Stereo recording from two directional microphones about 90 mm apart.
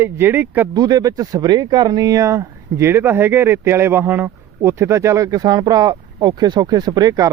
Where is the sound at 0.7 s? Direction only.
45° right (ahead or behind).